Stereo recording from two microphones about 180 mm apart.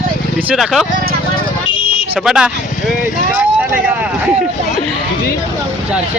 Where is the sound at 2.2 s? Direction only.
5° right (ahead or behind).